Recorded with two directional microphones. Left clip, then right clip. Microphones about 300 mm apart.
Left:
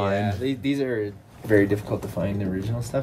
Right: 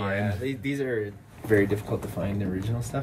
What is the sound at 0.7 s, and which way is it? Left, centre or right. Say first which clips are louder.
Speech: left 3 dB; left.